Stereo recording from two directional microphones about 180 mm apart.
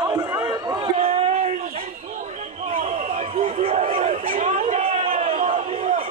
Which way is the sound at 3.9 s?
45° right (ahead or behind).